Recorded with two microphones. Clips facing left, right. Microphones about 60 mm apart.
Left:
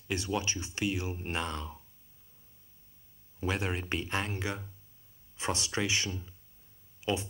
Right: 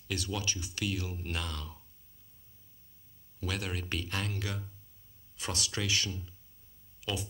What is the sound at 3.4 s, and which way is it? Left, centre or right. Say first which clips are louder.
Speech: left 4 dB; left.